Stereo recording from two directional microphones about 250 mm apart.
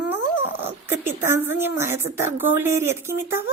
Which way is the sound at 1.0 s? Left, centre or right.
Centre.